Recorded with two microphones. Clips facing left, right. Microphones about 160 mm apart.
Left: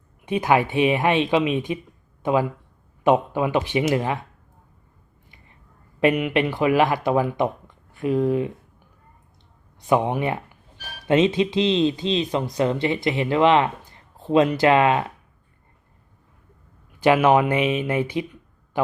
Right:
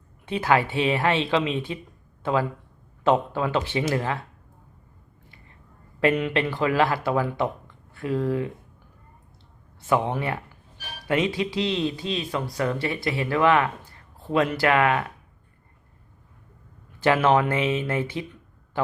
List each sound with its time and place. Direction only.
0.3 s speech: 15° left (ahead or behind)
6.0 s speech: 15° left (ahead or behind)
9.8 s speech: 15° left (ahead or behind)
17.0 s speech: 15° left (ahead or behind)